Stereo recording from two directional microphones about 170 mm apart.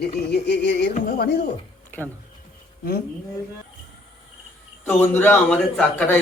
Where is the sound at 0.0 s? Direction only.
75° left (ahead or behind).